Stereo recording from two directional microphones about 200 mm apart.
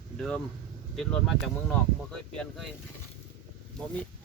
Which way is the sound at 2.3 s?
Centre (ahead or behind).